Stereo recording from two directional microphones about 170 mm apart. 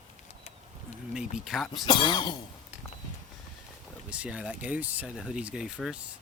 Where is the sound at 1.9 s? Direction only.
25° left (ahead or behind).